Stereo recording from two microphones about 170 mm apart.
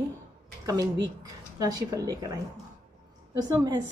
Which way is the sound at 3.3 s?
25° right (ahead or behind).